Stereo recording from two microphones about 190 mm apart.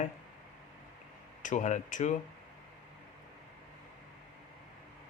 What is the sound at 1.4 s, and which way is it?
Speech, 40° left (ahead or behind).